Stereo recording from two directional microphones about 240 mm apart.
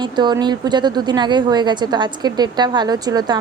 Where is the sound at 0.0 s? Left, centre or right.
Centre.